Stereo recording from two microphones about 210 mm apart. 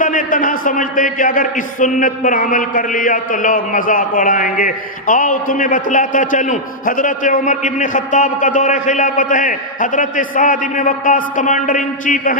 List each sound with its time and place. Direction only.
0.0 s a man's voice: 40° left (ahead or behind)